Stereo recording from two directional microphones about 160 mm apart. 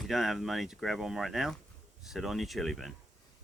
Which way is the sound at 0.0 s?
Centre (ahead or behind).